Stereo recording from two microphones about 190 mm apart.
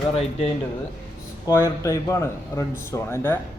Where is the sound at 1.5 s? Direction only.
15° left (ahead or behind).